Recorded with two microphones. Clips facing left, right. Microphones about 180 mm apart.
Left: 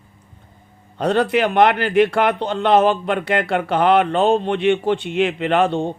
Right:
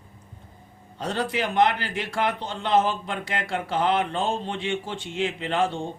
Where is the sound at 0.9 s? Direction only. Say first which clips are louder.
Left 10 dB; 65° left (ahead or behind).